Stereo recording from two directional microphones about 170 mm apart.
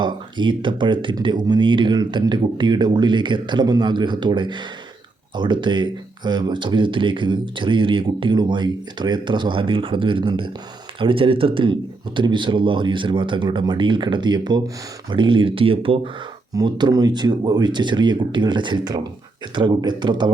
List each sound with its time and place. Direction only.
0.0 s speech: 25° right (ahead or behind)